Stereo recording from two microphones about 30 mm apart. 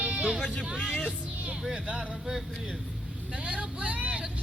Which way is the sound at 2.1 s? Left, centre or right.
Centre.